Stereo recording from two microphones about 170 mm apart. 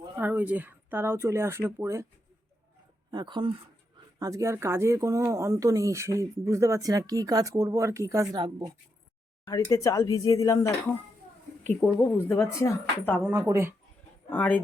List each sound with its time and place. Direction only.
0.2 s speech: 10° right (ahead or behind)
3.1 s a woman's voice: 25° right (ahead or behind)
9.4 s a woman's voice: 20° left (ahead or behind)
13.2 s speech: 15° right (ahead or behind)
14.3 s a woman's voice: 10° left (ahead or behind)